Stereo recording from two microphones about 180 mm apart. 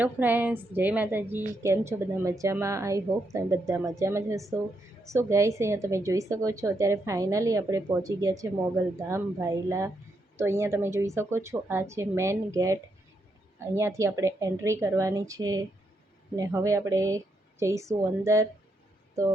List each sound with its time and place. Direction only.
0.0 s a woman's voice: 10° right (ahead or behind)